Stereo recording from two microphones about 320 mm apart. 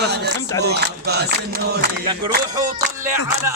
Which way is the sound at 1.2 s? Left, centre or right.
Right.